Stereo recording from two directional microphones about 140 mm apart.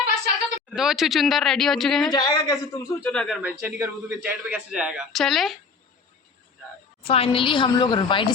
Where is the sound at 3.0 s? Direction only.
5° left (ahead or behind).